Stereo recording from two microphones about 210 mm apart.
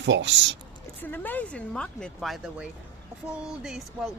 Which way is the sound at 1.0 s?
10° left (ahead or behind).